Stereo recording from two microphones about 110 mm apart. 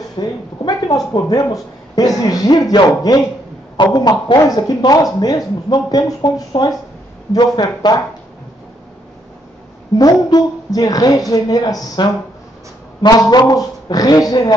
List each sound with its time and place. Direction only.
0.2 s speech: 35° left (ahead or behind)
9.9 s speech: 35° left (ahead or behind)